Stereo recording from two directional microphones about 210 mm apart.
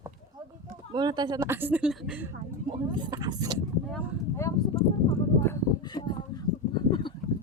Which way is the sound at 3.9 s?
15° left (ahead or behind).